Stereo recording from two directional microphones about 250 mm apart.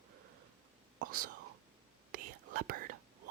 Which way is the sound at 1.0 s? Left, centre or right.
Right.